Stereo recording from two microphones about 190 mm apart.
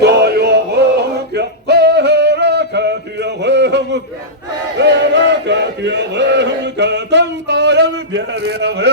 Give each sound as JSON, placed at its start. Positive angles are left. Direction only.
{"t": 0.0, "sound": "music", "side_deg": -60}
{"t": 4.8, "sound": "chant", "side_deg": -65}